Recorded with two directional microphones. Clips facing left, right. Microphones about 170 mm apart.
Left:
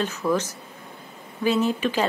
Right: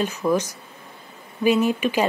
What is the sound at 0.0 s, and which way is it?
Speech, 15° right (ahead or behind).